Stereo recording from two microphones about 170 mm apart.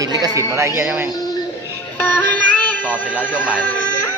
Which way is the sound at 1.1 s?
20° left (ahead or behind).